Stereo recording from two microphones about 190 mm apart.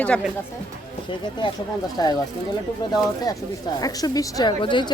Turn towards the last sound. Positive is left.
turn(degrees=25)  # may be behind; listen again after turning